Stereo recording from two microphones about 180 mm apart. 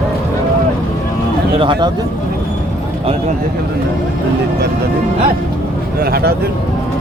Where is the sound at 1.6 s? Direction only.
25° right (ahead or behind).